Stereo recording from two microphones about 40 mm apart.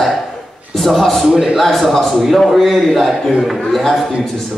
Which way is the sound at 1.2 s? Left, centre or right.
Right.